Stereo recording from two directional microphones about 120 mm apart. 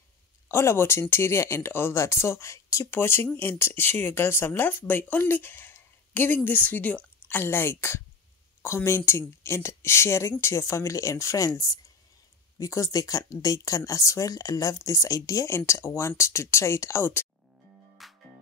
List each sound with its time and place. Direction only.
0.5 s speech: 20° left (ahead or behind)
18.0 s music: centre (ahead or behind)